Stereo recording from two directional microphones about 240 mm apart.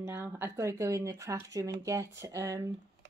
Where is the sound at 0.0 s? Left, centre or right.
Centre.